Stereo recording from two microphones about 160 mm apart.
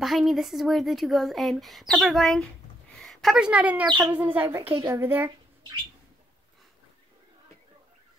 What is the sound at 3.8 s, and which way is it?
Speech, 30° right (ahead or behind).